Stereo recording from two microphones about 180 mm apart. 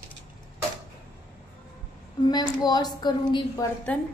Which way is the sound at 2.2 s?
25° left (ahead or behind).